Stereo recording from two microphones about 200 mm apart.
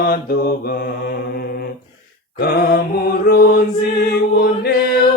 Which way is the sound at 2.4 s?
50° left (ahead or behind).